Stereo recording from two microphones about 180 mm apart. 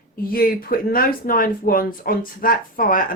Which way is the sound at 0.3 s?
55° left (ahead or behind).